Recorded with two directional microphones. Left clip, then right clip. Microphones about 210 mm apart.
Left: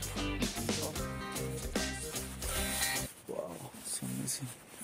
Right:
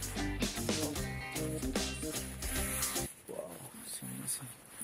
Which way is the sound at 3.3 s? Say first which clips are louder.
Left 3 dB; 25° left (ahead or behind).